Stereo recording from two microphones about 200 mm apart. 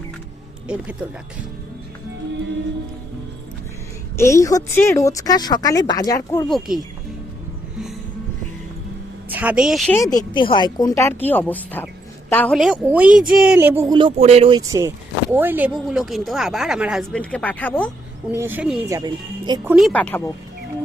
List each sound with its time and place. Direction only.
4.2 s speech: 15° left (ahead or behind)
6.5 s speech: centre (ahead or behind)
9.3 s speech: 5° right (ahead or behind)
10.0 s speech: 20° left (ahead or behind); by 14.1 s 20° right (ahead or behind)
14.2 s speech: 30° right (ahead or behind)
14.6 s speech: 15° right (ahead or behind); by 17.9 s 5° left (ahead or behind)
18.3 s speech: 10° right (ahead or behind)
18.9 s speech: 20° right (ahead or behind)
19.7 s speech: 5° left (ahead or behind)